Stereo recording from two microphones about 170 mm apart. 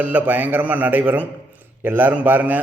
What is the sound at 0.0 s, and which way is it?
A man's voice, 10° right (ahead or behind).